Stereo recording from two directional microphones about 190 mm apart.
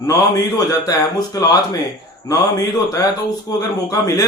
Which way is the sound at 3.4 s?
20° left (ahead or behind).